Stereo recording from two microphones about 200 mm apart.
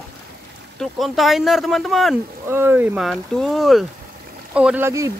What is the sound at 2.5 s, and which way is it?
Speech, 10° right (ahead or behind).